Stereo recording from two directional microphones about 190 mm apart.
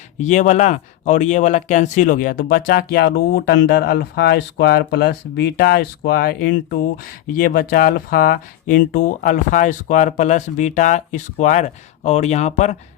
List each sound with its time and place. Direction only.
0.2 s speech: 40° left (ahead or behind)